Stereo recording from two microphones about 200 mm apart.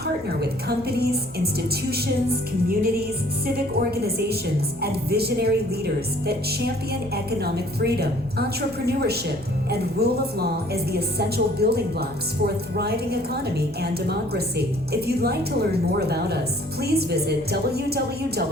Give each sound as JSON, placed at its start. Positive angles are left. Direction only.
{"t": 0.9, "sound": "a woman's voice", "side_deg": -50}